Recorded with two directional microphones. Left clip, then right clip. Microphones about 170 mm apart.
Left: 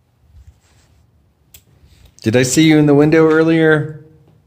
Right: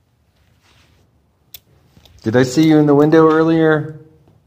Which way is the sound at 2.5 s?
20° left (ahead or behind).